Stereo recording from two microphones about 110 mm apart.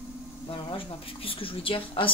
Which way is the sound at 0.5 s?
55° left (ahead or behind).